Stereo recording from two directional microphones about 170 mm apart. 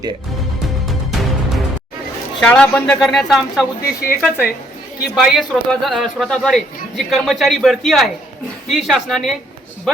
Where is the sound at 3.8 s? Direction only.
60° left (ahead or behind).